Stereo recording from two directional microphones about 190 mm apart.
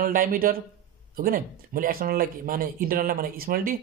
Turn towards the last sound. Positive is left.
turn(degrees=-50)  # may be behind; listen again after turning